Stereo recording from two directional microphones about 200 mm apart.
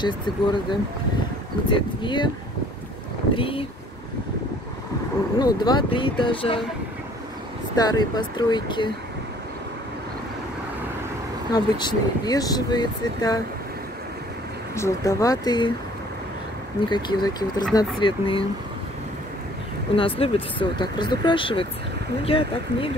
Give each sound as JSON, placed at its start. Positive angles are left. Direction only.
{"t": 0.0, "sound": "speech", "side_deg": 25}
{"t": 3.3, "sound": "speech", "side_deg": 25}
{"t": 5.4, "sound": "speech", "side_deg": 20}
{"t": 7.7, "sound": "speech", "side_deg": 20}
{"t": 11.5, "sound": "speech", "side_deg": 20}
{"t": 14.8, "sound": "speech", "side_deg": 15}
{"t": 16.9, "sound": "speech", "side_deg": 20}
{"t": 20.0, "sound": "speech", "side_deg": 25}